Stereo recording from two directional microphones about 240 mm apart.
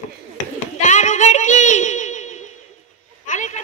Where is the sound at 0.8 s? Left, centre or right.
Left.